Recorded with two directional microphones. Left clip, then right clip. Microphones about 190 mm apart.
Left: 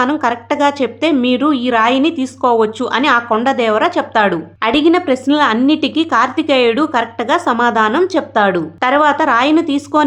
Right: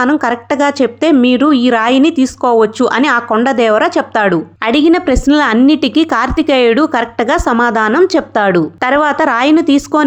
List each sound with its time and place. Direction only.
0.0 s a woman's voice: 25° right (ahead or behind)